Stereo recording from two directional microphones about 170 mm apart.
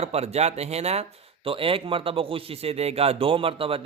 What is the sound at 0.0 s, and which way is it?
A man's voice, 40° right (ahead or behind).